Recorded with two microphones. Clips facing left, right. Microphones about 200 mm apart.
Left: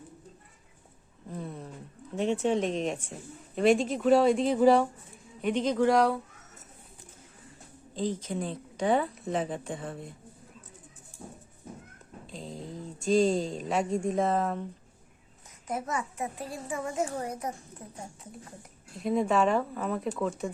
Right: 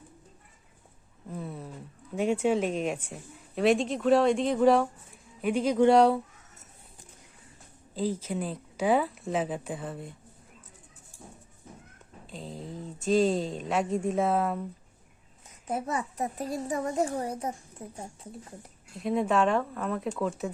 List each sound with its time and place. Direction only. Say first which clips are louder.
1.3 s a sound: right 1 dB; 5° right (ahead or behind)
2.1 s speech: right 1 dB; 10° right (ahead or behind)
5.8 s speech: right 4 dB; 25° right (ahead or behind)
7.9 s speech: right 1 dB; 5° right (ahead or behind)
12.2 s speech: even; centre (ahead or behind)
15.6 s a child's voice: right 2 dB; 30° right (ahead or behind)
17.4 s speech: right 2 dB; 25° right (ahead or behind)
18.9 s speech: even; centre (ahead or behind)